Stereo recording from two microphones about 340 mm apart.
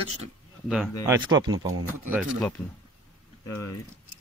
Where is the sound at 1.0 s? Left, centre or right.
Centre.